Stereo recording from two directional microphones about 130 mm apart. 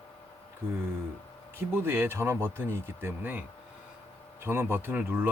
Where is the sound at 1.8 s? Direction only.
20° right (ahead or behind).